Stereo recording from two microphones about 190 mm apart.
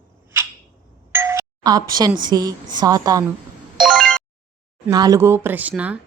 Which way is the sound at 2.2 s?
20° right (ahead or behind).